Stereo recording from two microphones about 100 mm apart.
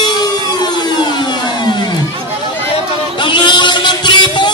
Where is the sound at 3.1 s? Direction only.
50° left (ahead or behind).